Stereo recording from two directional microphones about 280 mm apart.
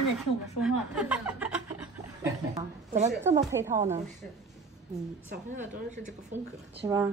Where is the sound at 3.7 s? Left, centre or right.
Right.